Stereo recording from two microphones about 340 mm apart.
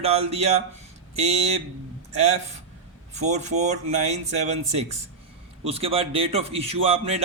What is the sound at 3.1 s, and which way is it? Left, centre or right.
Speech, right.